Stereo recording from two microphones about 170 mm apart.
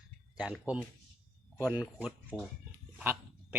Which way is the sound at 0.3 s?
5° right (ahead or behind).